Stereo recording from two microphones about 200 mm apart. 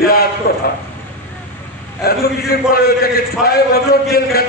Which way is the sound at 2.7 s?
50° left (ahead or behind).